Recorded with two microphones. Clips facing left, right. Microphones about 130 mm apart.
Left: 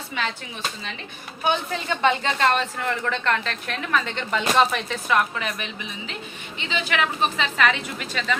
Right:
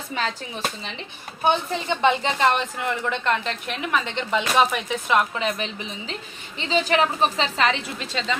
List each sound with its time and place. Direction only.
0.2 s a woman's voice: 40° right (ahead or behind)
1.5 s a woman's voice: 20° right (ahead or behind)